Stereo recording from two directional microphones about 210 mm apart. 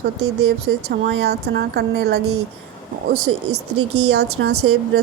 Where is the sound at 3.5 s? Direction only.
90° right.